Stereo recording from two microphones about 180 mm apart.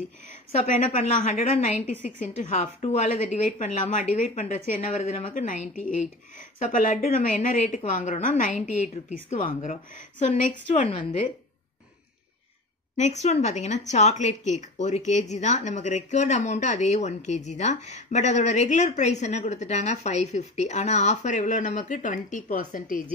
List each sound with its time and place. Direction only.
0.9 s a woman's voice: 40° left (ahead or behind)
12.9 s a woman's voice: 40° left (ahead or behind)